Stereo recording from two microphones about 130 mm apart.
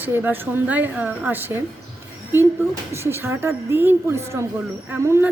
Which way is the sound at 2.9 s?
20° right (ahead or behind).